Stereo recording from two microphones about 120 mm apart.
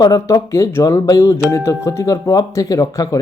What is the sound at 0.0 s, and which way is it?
Speech, 30° left (ahead or behind).